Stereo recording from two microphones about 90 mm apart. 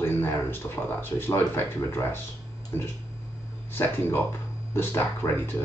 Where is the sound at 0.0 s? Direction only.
25° left (ahead or behind).